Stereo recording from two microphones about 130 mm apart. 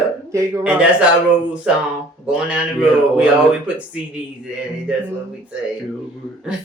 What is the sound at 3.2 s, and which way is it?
Speech, 5° right (ahead or behind).